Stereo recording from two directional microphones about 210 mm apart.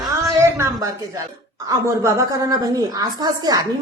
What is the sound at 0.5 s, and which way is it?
Speech, 15° right (ahead or behind).